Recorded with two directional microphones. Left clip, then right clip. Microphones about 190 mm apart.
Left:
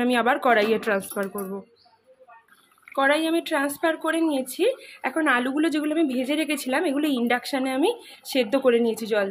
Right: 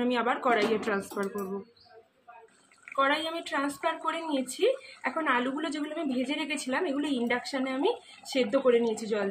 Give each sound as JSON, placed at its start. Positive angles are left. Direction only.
{"t": 0.0, "sound": "speech", "side_deg": 50}
{"t": 2.9, "sound": "a woman's voice", "side_deg": 55}